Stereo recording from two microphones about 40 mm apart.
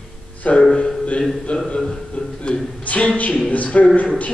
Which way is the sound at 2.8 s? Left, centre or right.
Left.